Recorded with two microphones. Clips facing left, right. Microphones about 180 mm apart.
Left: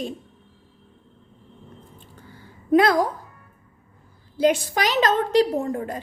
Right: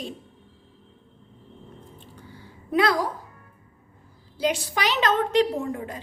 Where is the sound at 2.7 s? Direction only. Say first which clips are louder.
Left 5 dB; 50° left (ahead or behind).